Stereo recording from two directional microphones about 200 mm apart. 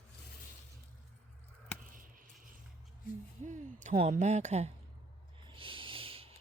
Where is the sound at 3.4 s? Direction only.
40° right (ahead or behind).